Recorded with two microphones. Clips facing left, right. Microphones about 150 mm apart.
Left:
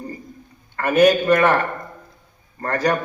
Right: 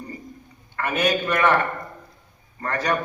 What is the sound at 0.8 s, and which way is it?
Speech, 45° left (ahead or behind).